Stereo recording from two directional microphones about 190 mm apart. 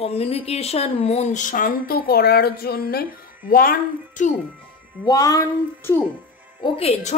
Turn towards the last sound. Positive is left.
turn(degrees=35)  # may be behind; listen again after turning